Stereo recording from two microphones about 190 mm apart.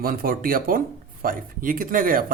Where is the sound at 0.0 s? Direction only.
50° right (ahead or behind).